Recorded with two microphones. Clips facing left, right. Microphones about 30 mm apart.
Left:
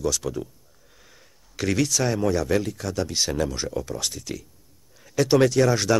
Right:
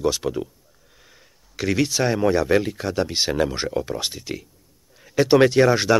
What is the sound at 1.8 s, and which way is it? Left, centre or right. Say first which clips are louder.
Speech: right 3 dB; right.